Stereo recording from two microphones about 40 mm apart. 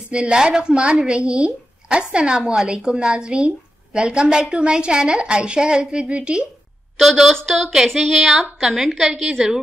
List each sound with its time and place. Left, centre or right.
0.1 s speech: right
7.0 s a woman's voice: centre